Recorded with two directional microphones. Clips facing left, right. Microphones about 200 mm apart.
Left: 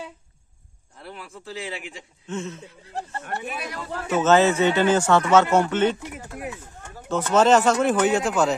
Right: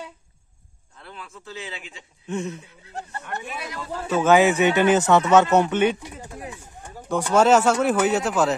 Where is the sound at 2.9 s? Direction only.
35° left (ahead or behind).